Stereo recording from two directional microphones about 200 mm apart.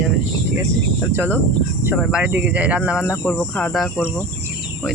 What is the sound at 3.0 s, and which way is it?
Speech, 10° left (ahead or behind).